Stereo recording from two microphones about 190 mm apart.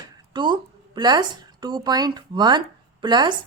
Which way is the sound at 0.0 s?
25° right (ahead or behind).